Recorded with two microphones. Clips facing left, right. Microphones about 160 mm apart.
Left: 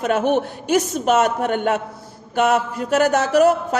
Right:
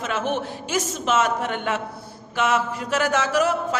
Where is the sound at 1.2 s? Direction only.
50° left (ahead or behind).